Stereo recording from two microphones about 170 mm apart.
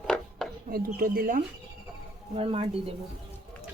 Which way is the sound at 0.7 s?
60° right (ahead or behind).